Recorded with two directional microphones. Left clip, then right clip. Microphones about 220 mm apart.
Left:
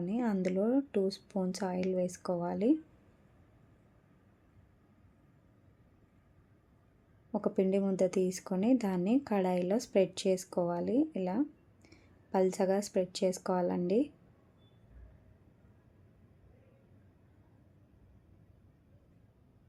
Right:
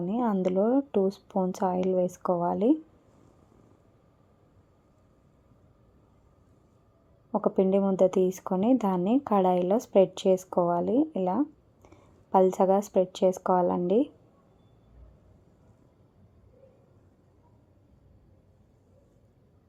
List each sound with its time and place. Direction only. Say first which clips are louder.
0.0 s speech: right 7 dB; centre (ahead or behind)
7.3 s speech: right 7 dB; centre (ahead or behind)